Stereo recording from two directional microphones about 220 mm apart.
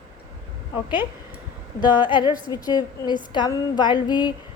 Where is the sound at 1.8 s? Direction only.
20° left (ahead or behind).